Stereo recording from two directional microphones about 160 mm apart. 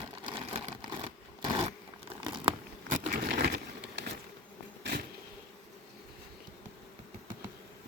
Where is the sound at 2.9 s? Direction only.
55° right (ahead or behind).